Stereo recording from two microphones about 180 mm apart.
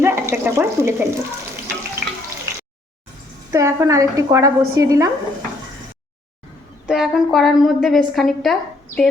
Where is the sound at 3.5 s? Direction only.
15° right (ahead or behind).